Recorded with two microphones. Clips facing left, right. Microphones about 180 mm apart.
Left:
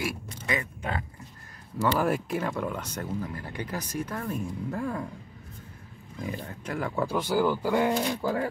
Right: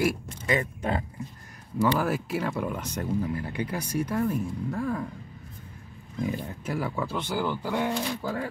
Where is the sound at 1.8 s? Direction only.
5° right (ahead or behind).